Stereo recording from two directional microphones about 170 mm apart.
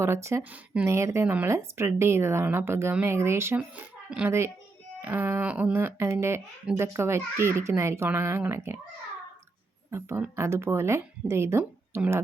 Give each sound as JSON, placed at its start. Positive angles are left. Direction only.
{"t": 0.0, "sound": "speech", "side_deg": -15}
{"t": 9.9, "sound": "speech", "side_deg": -15}